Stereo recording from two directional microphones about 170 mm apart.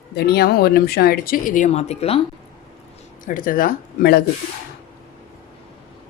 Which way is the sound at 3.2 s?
55° left (ahead or behind).